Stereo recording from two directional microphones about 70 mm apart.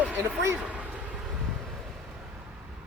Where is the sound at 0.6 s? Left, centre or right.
Centre.